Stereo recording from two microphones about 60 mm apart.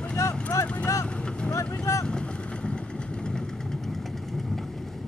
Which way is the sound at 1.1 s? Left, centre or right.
Centre.